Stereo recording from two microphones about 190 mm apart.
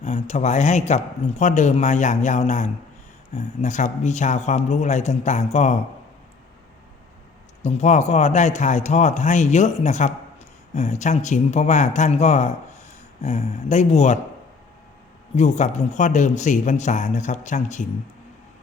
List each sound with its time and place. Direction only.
0.0 s speech: 35° left (ahead or behind)
7.6 s speech: 35° left (ahead or behind)
15.4 s speech: 35° left (ahead or behind)